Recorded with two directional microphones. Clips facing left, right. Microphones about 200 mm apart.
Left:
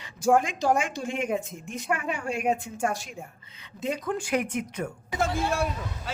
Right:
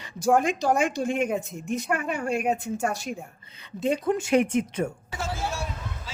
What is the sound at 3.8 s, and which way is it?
Speech, 25° right (ahead or behind).